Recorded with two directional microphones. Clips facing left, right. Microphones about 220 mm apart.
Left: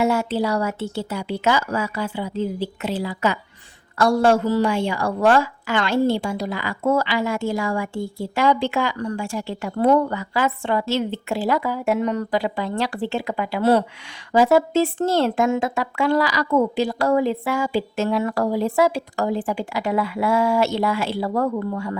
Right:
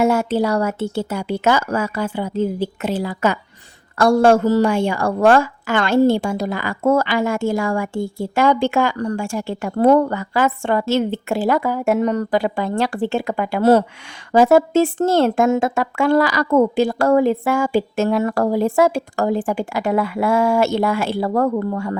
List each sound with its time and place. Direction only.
0.0 s a woman's voice: 45° right (ahead or behind)